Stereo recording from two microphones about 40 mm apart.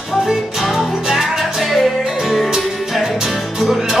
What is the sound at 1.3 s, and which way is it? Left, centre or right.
Music, centre.